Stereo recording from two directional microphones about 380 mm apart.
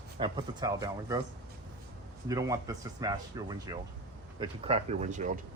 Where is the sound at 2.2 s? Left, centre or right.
Centre.